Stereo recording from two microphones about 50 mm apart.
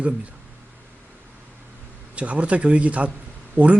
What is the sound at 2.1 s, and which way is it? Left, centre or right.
A man's voice, right.